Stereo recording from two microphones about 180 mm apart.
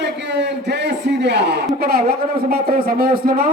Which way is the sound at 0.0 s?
70° right (ahead or behind).